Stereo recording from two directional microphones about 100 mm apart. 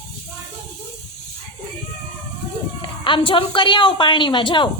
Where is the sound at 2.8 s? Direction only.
55° left (ahead or behind).